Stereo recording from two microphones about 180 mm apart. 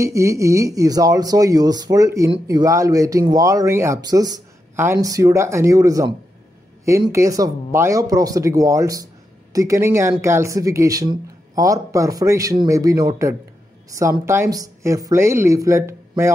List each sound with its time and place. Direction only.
0.0 s speech: 15° right (ahead or behind)